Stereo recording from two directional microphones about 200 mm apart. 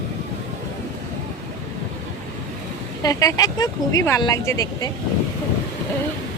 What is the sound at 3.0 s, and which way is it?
Speech, 20° left (ahead or behind).